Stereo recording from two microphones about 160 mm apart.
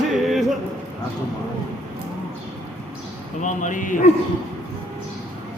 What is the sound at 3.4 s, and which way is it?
Speech, 50° left (ahead or behind).